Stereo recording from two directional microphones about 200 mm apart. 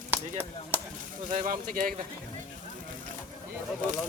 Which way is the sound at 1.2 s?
40° right (ahead or behind).